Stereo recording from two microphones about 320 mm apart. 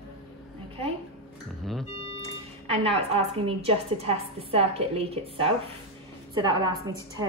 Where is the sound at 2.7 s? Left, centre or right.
Centre.